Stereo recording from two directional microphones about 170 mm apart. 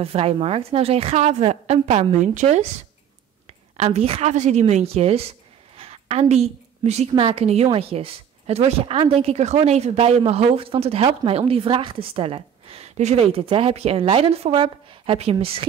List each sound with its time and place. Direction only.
0.0 s speech: 35° right (ahead or behind)
3.4 s a woman's voice: 40° right (ahead or behind)